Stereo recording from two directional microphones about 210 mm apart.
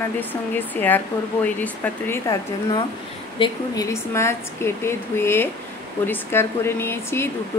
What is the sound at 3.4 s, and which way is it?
A woman's voice, 15° left (ahead or behind).